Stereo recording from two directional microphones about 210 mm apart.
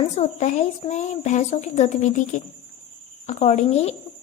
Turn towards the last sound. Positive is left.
turn(degrees=30)  # may be behind; listen again after turning